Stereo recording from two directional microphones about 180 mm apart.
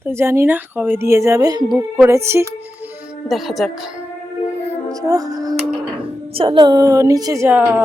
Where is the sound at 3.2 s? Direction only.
Centre (ahead or behind).